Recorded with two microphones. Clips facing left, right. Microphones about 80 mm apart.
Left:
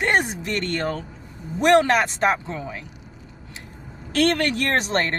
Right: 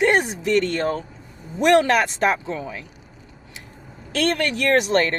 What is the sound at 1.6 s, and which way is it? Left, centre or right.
Speech, left.